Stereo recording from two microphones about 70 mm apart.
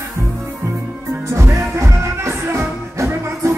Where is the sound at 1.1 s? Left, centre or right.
Right.